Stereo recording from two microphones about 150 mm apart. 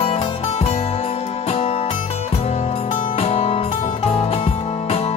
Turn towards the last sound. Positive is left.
turn(degrees=45)  # may be behind; listen again after turning